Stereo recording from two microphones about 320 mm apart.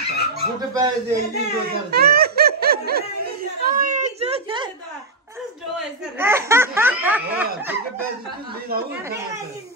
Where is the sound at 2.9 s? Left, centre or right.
Right.